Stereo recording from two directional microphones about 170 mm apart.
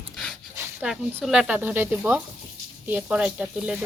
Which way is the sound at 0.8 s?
5° right (ahead or behind).